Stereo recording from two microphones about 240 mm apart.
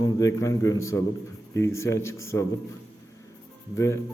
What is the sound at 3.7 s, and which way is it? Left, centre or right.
Speech, centre.